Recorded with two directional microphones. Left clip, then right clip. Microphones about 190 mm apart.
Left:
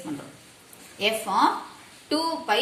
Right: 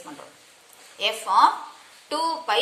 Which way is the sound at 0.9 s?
15° right (ahead or behind).